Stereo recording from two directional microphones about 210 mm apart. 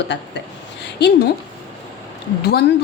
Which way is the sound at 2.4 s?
50° left (ahead or behind).